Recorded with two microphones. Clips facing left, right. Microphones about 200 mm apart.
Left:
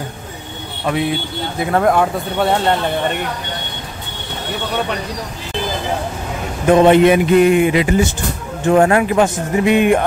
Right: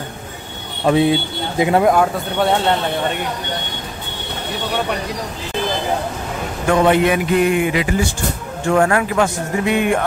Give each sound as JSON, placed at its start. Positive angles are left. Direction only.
{"t": 0.8, "sound": "speech", "side_deg": -30}
{"t": 1.6, "sound": "speech", "side_deg": -15}
{"t": 1.9, "sound": "speech", "side_deg": 0}
{"t": 6.7, "sound": "a man's voice", "side_deg": 25}